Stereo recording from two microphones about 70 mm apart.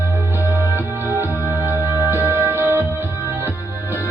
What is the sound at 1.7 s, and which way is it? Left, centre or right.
Music, right.